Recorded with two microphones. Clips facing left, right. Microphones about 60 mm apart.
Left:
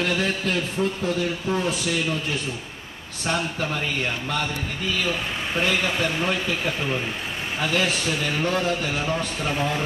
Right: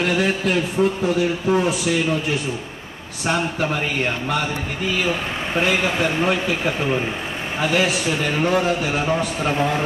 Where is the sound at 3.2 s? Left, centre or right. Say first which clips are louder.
Right 4 dB; right.